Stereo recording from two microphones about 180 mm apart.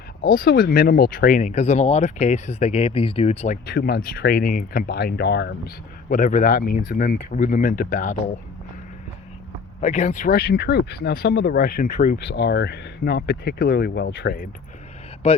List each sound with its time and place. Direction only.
0.3 s speech: 55° left (ahead or behind); by 3.6 s 35° left (ahead or behind)
3.7 s speech: 55° left (ahead or behind)
6.1 s speech: 45° left (ahead or behind)
9.8 s speech: 40° left (ahead or behind); by 14.3 s 70° left (ahead or behind)